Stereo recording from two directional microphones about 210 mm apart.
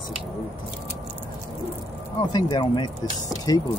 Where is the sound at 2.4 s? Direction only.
20° left (ahead or behind).